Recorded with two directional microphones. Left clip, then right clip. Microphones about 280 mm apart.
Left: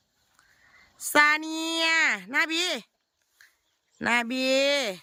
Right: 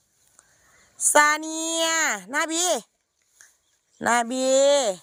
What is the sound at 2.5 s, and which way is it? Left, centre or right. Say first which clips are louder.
Speech: right 3 dB; left.